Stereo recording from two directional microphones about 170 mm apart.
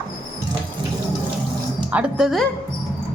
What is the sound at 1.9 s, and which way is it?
Speech, 5° right (ahead or behind).